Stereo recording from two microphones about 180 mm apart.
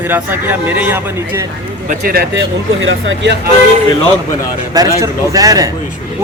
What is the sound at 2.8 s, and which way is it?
Speech, 90° right.